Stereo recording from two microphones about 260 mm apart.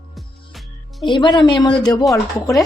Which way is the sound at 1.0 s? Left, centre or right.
Centre.